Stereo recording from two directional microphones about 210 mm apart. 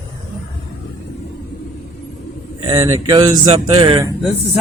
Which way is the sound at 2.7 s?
20° right (ahead or behind).